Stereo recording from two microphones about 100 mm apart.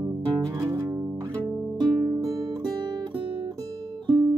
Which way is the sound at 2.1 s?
35° right (ahead or behind).